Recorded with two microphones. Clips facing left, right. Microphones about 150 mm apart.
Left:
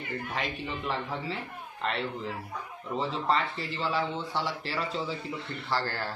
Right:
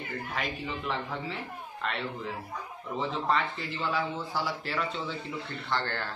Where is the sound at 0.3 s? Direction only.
Centre (ahead or behind).